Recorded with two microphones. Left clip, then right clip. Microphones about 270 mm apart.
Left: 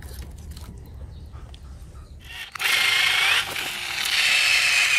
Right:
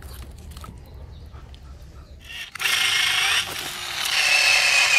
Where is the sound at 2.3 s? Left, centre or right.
Centre.